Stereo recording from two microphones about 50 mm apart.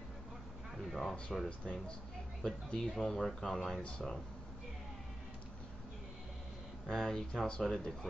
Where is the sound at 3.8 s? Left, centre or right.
Left.